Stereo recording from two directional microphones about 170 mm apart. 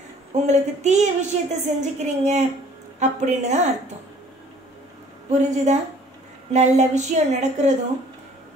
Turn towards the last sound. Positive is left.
turn(degrees=-40)  # may be behind; listen again after turning